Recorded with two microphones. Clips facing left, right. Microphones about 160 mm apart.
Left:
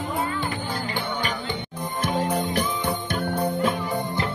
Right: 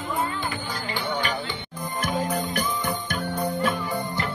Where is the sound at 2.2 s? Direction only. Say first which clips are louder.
Left 2 dB; 30° left (ahead or behind).